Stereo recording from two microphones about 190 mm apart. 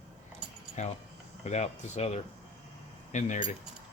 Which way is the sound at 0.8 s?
40° left (ahead or behind).